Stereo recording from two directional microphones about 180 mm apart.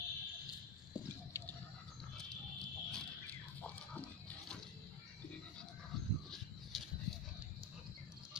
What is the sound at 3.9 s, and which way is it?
Pig, 10° left (ahead or behind).